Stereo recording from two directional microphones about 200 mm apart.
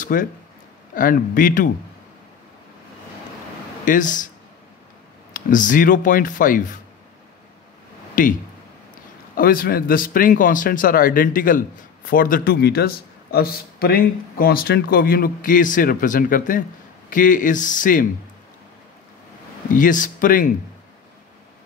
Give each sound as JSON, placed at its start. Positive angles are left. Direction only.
{"t": 0.0, "sound": "speech", "side_deg": 40}
{"t": 3.8, "sound": "speech", "side_deg": 40}
{"t": 5.3, "sound": "speech", "side_deg": 40}
{"t": 8.1, "sound": "a sound", "side_deg": 45}
{"t": 9.4, "sound": "speech", "side_deg": 45}
{"t": 19.7, "sound": "speech", "side_deg": 40}